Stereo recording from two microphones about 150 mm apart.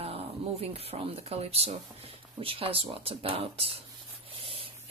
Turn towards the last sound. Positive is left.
turn(degrees=-40)  # may be behind; listen again after turning